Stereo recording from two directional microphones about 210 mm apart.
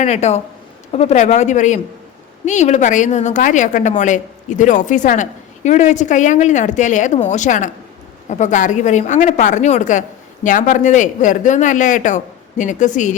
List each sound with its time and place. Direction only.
0.0 s a woman's voice: 30° left (ahead or behind)